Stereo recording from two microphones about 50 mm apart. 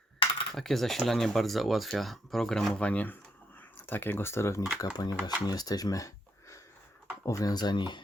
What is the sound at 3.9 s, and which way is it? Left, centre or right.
Speech, left.